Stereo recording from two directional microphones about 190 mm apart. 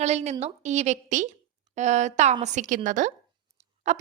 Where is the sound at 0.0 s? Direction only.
35° right (ahead or behind).